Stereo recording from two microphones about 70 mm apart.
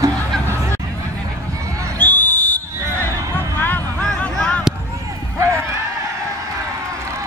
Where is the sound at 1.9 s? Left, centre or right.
Left.